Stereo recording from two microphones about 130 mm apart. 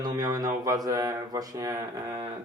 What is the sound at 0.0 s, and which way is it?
Speech, 30° right (ahead or behind).